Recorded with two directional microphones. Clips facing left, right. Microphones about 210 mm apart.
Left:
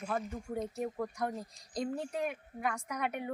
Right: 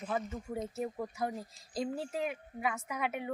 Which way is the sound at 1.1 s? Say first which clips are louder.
Even; 5° right (ahead or behind).